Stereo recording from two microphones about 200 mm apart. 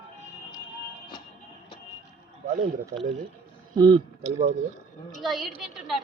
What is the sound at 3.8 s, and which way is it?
Speech, 25° right (ahead or behind).